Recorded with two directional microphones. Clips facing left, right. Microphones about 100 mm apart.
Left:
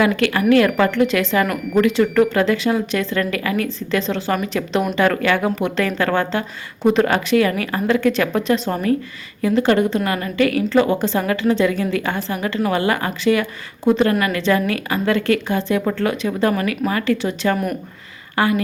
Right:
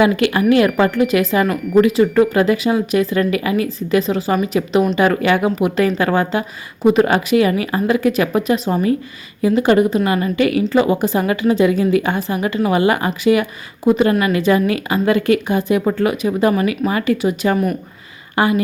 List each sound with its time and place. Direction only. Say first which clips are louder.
0.0 s a woman's voice: right 3 dB; 15° right (ahead or behind)
4.9 s a woman's voice: right 2 dB; 15° right (ahead or behind)